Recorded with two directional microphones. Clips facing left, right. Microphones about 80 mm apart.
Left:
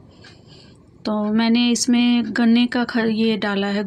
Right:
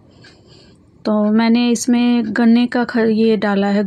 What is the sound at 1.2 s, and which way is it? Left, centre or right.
Speech, right.